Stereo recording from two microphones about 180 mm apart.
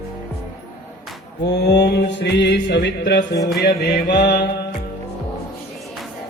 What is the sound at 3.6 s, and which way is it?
Music, 65° left (ahead or behind).